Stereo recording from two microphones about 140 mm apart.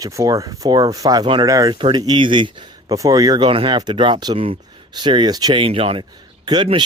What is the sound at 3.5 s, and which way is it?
Speech, 40° right (ahead or behind).